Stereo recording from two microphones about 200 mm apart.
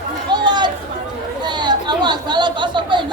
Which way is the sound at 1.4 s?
20° right (ahead or behind).